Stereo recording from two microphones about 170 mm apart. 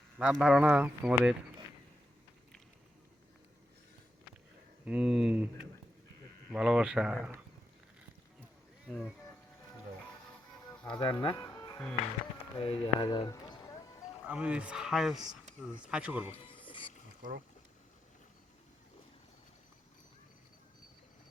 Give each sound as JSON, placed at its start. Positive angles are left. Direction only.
{"t": 0.2, "sound": "speech", "side_deg": -5}
{"t": 4.9, "sound": "speech", "side_deg": -5}
{"t": 6.5, "sound": "speech", "side_deg": -5}
{"t": 8.9, "sound": "speech", "side_deg": 0}
{"t": 10.8, "sound": "speech", "side_deg": 25}
{"t": 14.3, "sound": "speech", "side_deg": -5}
{"t": 16.3, "sound": "music", "side_deg": 30}
{"t": 17.2, "sound": "speech", "side_deg": -50}